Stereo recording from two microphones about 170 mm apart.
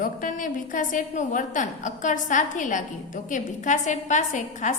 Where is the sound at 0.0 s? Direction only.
50° left (ahead or behind).